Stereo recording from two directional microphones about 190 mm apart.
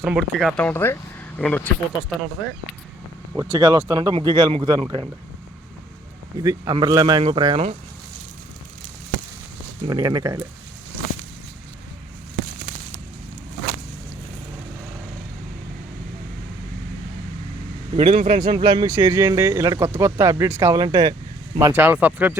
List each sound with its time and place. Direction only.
0.0 s speech: 5° right (ahead or behind)
3.3 s speech: 15° right (ahead or behind)
6.4 s speech: 20° right (ahead or behind)
9.8 s speech: 20° right (ahead or behind)
17.9 s a man's voice: 30° right (ahead or behind)
18.5 s speech: 25° right (ahead or behind)
21.6 s speech: 10° right (ahead or behind)